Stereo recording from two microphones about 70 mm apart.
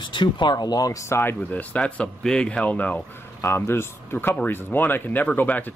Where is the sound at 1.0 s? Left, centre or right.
Left.